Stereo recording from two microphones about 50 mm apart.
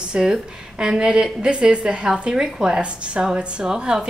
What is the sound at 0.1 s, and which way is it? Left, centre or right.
A woman's voice, centre.